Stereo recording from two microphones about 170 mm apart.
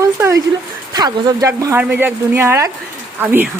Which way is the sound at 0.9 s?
20° right (ahead or behind).